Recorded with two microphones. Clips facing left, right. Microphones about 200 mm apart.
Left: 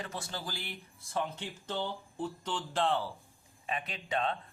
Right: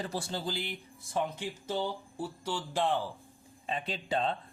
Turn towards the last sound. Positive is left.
turn(degrees=-30)  # may be behind; listen again after turning